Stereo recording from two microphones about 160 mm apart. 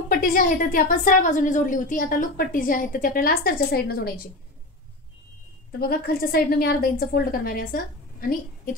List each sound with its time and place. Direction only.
0.1 s a woman's voice: 60° left (ahead or behind)
5.7 s a woman's voice: 70° left (ahead or behind)